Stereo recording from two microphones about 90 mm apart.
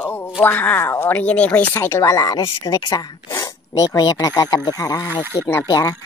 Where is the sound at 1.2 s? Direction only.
15° left (ahead or behind).